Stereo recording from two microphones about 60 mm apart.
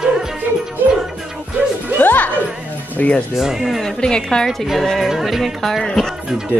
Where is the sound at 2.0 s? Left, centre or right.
Left.